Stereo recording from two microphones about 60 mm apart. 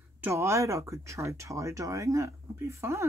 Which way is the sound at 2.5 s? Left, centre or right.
Right.